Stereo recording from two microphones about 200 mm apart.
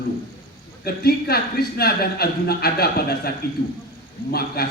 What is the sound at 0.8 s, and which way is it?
A man's voice, 50° left (ahead or behind).